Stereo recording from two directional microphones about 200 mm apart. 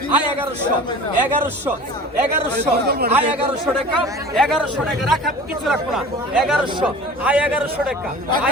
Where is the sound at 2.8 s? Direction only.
50° right (ahead or behind).